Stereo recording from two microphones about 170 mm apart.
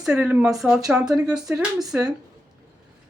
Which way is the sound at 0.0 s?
5° right (ahead or behind).